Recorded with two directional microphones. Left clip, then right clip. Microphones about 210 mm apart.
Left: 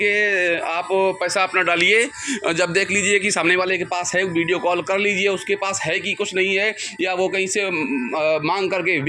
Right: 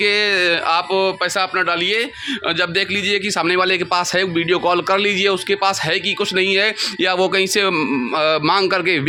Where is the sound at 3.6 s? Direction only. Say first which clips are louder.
Right 4 dB; 30° right (ahead or behind).